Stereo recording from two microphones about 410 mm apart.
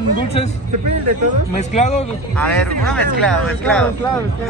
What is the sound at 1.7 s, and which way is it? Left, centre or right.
Speech, centre.